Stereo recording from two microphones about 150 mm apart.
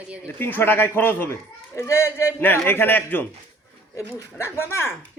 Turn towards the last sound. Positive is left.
turn(degrees=15)  # may be behind; listen again after turning